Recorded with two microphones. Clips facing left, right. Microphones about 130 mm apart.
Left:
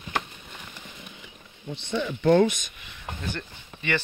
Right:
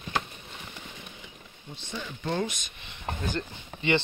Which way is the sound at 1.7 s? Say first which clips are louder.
Left 10 dB; 75° left (ahead or behind).